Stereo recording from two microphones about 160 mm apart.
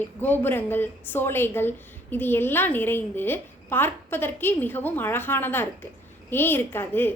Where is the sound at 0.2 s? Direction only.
10° left (ahead or behind).